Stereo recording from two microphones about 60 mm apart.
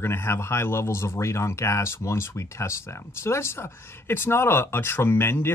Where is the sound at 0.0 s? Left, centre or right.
Left.